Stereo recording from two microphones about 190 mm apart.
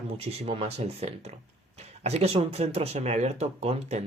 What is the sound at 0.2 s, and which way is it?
Speech, 30° right (ahead or behind).